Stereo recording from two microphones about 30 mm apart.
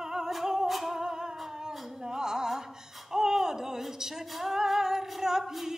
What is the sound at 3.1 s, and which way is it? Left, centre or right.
A woman's voice, centre.